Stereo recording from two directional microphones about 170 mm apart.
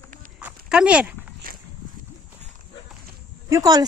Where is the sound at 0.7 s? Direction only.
5° right (ahead or behind).